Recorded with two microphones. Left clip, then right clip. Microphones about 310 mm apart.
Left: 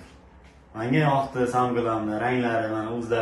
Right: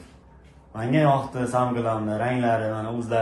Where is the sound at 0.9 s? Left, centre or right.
Right.